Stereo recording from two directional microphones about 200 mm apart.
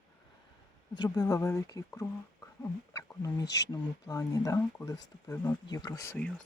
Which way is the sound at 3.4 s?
60° left (ahead or behind).